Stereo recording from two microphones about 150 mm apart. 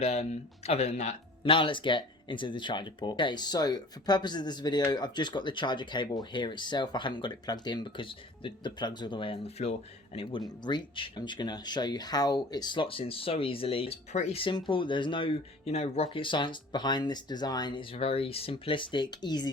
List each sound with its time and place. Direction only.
0.0 s speech: 45° left (ahead or behind)
1.5 s speech: 35° left (ahead or behind)
16.1 s speech: 35° left (ahead or behind)
17.9 s speech: 40° left (ahead or behind)